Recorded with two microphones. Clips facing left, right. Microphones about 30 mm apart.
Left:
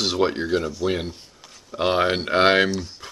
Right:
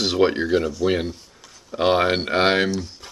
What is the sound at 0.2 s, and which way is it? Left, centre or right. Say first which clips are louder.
Speech: right 5 dB; centre.